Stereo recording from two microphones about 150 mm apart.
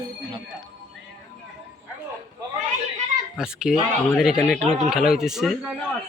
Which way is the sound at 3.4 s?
5° right (ahead or behind).